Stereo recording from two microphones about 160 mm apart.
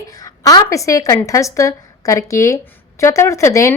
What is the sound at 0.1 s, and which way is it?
A woman's voice, 20° left (ahead or behind).